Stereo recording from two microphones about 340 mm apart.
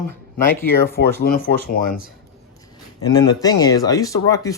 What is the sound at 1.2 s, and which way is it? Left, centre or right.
Speech, left.